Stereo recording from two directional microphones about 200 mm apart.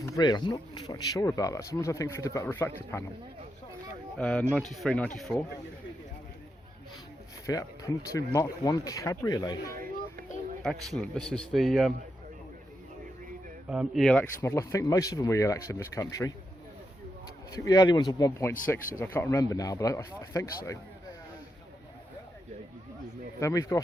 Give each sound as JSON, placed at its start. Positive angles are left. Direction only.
{"t": 0.0, "sound": "speech", "side_deg": 20}
{"t": 4.2, "sound": "a man's voice", "side_deg": 5}
{"t": 7.4, "sound": "speech", "side_deg": 20}
{"t": 9.7, "sound": "a sound", "side_deg": -45}
{"t": 10.6, "sound": "a man's voice", "side_deg": 0}
{"t": 13.7, "sound": "speech", "side_deg": 0}
{"t": 17.5, "sound": "speech", "side_deg": 15}
{"t": 23.4, "sound": "speech", "side_deg": 15}